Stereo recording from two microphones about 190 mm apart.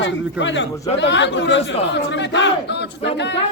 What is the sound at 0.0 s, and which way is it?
Speech, 75° left (ahead or behind).